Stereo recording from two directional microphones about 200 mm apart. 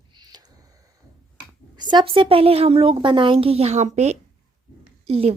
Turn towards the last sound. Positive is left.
turn(degrees=-30)  # may be behind; listen again after turning